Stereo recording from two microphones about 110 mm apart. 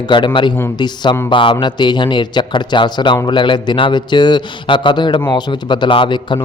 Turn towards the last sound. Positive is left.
turn(degrees=50)  # may be behind; listen again after turning